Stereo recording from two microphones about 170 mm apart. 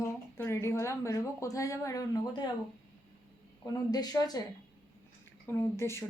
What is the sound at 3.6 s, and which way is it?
Speech, 20° left (ahead or behind).